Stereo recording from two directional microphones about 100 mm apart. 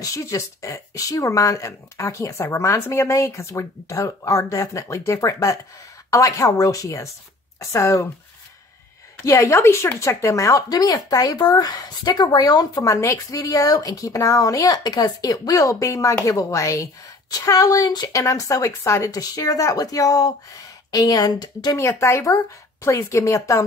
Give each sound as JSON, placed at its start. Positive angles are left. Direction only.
{"t": 0.0, "sound": "speech", "side_deg": 30}
{"t": 9.2, "sound": "speech", "side_deg": 30}
{"t": 21.7, "sound": "speech", "side_deg": 25}